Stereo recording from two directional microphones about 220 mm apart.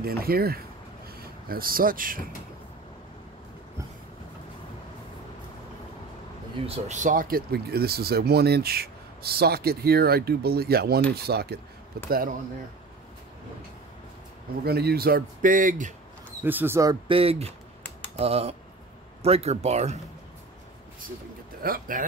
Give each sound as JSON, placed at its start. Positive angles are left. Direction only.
{"t": 0.0, "sound": "speech", "side_deg": -45}
{"t": 6.6, "sound": "speech", "side_deg": -30}
{"t": 14.6, "sound": "speech", "side_deg": -45}
{"t": 16.4, "sound": "speech", "side_deg": -10}
{"t": 17.1, "sound": "speech", "side_deg": -25}
{"t": 21.6, "sound": "speech", "side_deg": -40}